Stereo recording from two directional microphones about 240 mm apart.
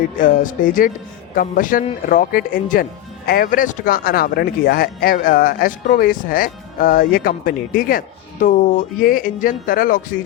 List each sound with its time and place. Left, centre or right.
0.2 s speech: left